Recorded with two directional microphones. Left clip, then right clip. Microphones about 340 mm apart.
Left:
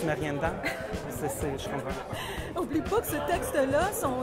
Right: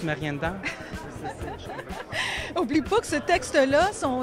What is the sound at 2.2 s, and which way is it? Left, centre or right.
A woman's voice, right.